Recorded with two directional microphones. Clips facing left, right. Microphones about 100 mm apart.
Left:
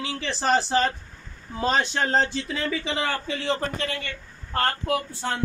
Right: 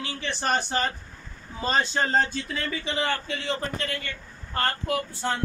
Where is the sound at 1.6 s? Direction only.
75° left (ahead or behind).